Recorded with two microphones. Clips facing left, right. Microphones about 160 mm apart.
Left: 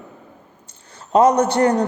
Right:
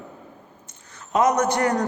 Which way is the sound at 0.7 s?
30° left (ahead or behind).